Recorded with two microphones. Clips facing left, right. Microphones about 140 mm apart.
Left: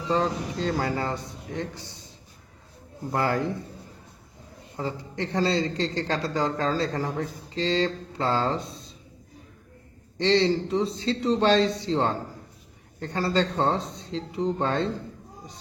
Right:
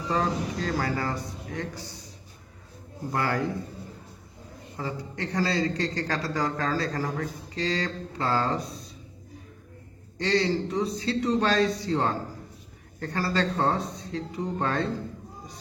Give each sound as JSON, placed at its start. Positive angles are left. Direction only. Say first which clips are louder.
{"t": 0.1, "sound": "a man's voice", "louder": "left 2 dB", "side_deg": 25}
{"t": 3.1, "sound": "a man's voice", "louder": "left 2 dB", "side_deg": 25}
{"t": 4.8, "sound": "a man's voice", "louder": "left 2 dB", "side_deg": 30}
{"t": 10.2, "sound": "a man's voice", "louder": "left 3 dB", "side_deg": 25}